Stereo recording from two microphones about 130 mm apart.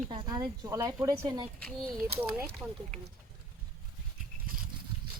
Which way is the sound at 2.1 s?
15° right (ahead or behind).